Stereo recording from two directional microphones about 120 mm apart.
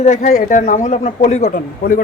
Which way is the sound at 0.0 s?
80° left.